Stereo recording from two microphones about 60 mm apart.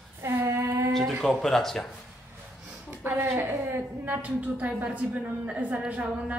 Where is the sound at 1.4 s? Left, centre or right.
Centre.